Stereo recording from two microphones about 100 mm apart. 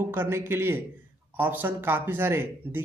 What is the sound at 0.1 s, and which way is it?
Speech, 20° right (ahead or behind).